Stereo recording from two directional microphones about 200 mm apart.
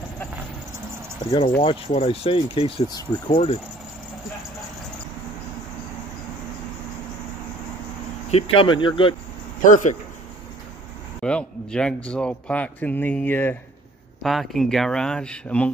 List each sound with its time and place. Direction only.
1.6 s speech: 25° left (ahead or behind)
8.3 s speech: 30° left (ahead or behind)
9.6 s speech: 40° left (ahead or behind)
11.2 s speech: 5° left (ahead or behind)